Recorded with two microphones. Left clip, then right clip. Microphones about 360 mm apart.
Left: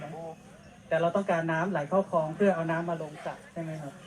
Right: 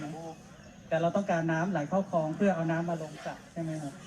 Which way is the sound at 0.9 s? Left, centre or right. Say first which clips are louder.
Left 2 dB; left.